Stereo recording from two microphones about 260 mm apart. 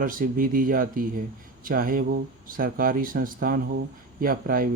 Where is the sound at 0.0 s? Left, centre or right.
Right.